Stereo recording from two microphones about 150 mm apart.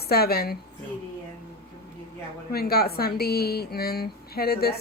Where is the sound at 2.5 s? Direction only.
90° left.